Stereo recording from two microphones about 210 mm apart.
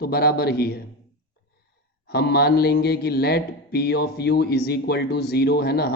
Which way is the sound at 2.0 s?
50° left (ahead or behind).